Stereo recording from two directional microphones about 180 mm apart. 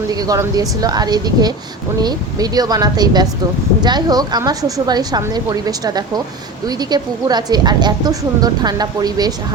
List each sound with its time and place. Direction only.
0.1 s speech: 20° right (ahead or behind)